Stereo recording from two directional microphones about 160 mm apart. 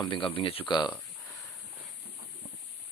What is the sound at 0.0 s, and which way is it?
Speech, 30° left (ahead or behind).